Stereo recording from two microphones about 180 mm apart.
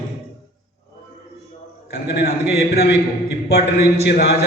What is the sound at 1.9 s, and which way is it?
Speech, 70° left (ahead or behind).